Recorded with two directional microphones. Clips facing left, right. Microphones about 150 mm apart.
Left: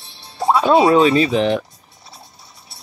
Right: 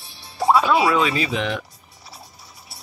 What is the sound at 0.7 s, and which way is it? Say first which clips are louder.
Speech: left 6 dB; 30° left (ahead or behind).